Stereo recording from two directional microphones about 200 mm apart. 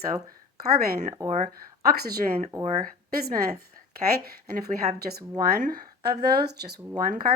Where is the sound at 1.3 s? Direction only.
40° right (ahead or behind).